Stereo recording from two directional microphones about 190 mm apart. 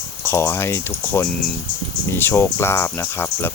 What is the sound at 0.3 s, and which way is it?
Speech, 15° left (ahead or behind).